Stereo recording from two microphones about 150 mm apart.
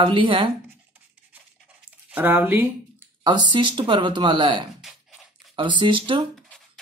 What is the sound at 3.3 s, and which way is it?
Speech, 30° right (ahead or behind).